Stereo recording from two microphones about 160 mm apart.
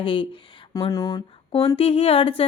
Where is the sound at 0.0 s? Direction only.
30° left (ahead or behind).